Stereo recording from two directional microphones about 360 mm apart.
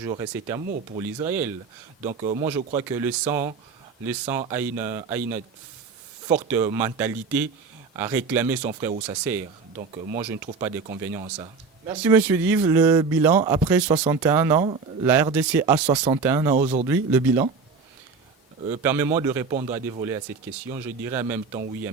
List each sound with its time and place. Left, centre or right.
0.0 s speech: centre
2.0 s speech: centre
2.7 s speech: centre
8.9 s speech: centre
10.4 s speech: centre
16.6 s speech: centre
16.9 s speech: centre
18.8 s speech: centre